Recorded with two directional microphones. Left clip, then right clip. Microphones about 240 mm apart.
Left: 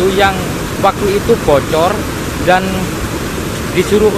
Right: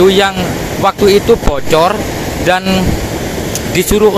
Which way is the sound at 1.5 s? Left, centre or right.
Right.